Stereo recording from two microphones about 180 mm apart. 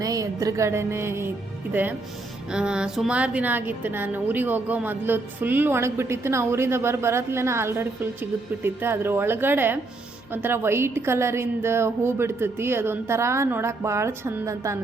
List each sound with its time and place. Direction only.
0.0 s a woman's voice: 20° right (ahead or behind)